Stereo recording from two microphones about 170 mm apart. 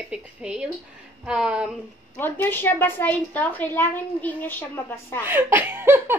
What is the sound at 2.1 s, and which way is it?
A woman's voice, 10° left (ahead or behind).